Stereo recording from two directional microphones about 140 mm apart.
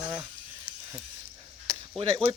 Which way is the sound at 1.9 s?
40° right (ahead or behind).